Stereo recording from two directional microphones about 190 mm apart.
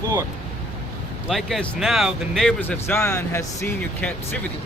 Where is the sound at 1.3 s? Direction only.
Centre (ahead or behind).